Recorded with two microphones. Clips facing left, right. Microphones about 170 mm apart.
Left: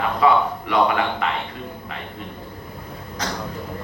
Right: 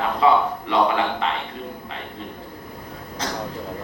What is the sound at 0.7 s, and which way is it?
Speech, 25° right (ahead or behind).